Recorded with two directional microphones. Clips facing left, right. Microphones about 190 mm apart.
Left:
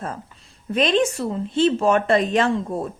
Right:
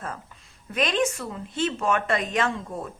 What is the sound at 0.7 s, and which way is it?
A woman's voice, 30° left (ahead or behind).